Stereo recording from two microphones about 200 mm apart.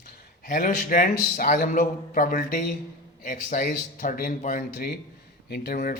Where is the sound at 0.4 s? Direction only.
45° left (ahead or behind).